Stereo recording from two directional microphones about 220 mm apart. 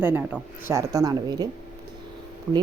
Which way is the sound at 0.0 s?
10° right (ahead or behind).